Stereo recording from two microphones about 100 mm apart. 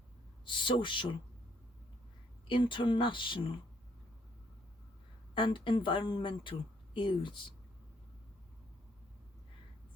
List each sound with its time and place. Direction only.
0.4 s speech: 55° left (ahead or behind)
2.5 s speech: 55° left (ahead or behind)
5.3 s speech: 55° left (ahead or behind)